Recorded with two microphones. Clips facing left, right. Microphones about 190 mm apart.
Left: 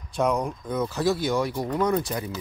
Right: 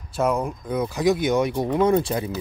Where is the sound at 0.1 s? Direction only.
5° right (ahead or behind).